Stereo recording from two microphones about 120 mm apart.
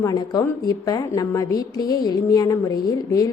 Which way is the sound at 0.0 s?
30° left (ahead or behind).